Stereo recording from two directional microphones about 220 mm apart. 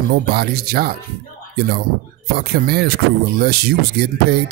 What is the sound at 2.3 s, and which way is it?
Speech, 45° right (ahead or behind).